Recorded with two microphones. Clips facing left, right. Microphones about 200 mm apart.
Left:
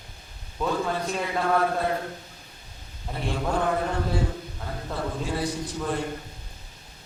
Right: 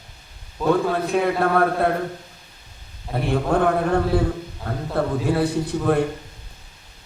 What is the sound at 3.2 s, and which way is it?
A man's voice, 60° right (ahead or behind).